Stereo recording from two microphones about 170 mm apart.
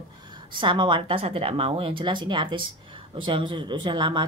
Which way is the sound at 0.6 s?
30° right (ahead or behind).